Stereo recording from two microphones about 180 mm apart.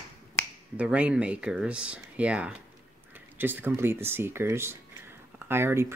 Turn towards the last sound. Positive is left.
turn(degrees=-15)  # may be behind; listen again after turning